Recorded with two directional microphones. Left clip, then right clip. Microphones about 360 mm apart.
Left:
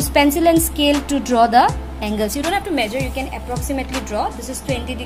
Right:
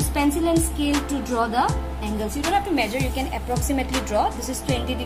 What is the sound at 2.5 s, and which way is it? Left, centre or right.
Speech, centre.